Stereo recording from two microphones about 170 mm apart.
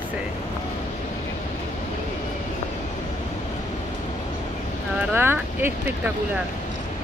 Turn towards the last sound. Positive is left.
turn(degrees=-10)  # may be behind; listen again after turning